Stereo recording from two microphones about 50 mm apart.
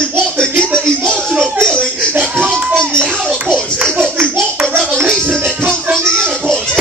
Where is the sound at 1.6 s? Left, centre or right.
Centre.